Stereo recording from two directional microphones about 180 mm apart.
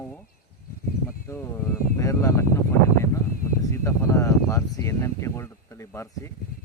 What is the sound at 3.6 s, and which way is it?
Speech, 15° left (ahead or behind).